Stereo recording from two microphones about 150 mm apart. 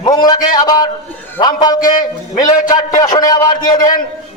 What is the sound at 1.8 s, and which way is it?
Speech, 60° left (ahead or behind).